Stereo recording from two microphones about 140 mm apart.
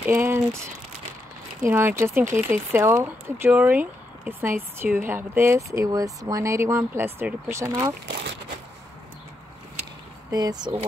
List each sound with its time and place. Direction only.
0.0 s speech: 15° right (ahead or behind)
1.6 s speech: 15° right (ahead or behind)
10.3 s speech: 30° right (ahead or behind)